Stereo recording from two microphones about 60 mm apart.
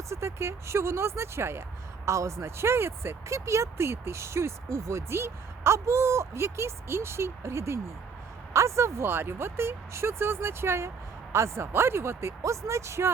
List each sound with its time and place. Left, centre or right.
0.1 s speech: right